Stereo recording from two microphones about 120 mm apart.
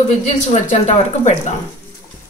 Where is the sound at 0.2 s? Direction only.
75° left (ahead or behind).